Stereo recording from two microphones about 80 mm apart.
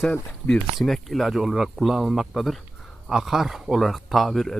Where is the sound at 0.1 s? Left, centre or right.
Centre.